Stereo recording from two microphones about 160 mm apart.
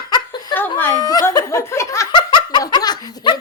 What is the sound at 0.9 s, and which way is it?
Laughter, 25° left (ahead or behind).